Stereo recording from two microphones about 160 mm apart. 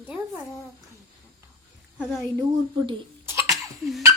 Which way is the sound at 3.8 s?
Centre (ahead or behind).